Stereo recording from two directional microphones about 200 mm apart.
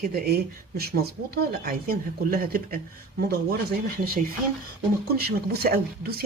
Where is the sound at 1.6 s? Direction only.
50° right (ahead or behind).